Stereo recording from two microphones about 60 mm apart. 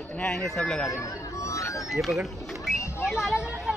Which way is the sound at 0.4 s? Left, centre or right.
Centre.